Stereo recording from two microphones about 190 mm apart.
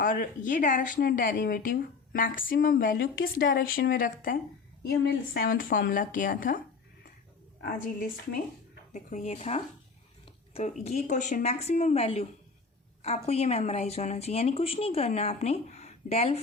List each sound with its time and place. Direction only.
0.0 s speech: 45° left (ahead or behind)
7.6 s speech: 50° left (ahead or behind)
8.9 s speech: 40° left (ahead or behind)
10.8 s speech: 40° left (ahead or behind)